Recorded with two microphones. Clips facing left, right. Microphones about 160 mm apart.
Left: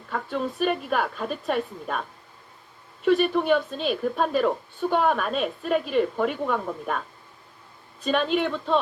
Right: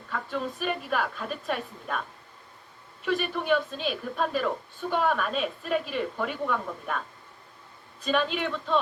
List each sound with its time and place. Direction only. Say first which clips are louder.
0.1 s a woman's voice: left 4 dB; 55° left (ahead or behind)
3.0 s a woman's voice: left 8 dB; 55° left (ahead or behind)
8.0 s a woman's voice: left 3 dB; 55° left (ahead or behind)